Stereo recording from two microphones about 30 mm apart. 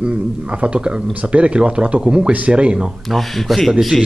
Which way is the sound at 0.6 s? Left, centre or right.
Right.